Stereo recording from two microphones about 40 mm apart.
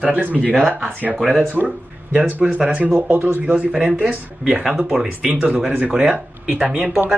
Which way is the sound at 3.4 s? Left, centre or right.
Right.